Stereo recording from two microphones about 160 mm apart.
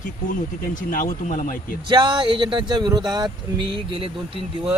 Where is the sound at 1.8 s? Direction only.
30° right (ahead or behind).